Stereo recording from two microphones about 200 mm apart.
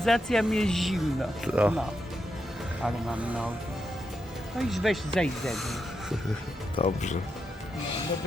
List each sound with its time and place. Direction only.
0.0 s speech: centre (ahead or behind)
2.8 s speech: 5° right (ahead or behind)
4.5 s speech: centre (ahead or behind)
6.7 s speech: 35° left (ahead or behind)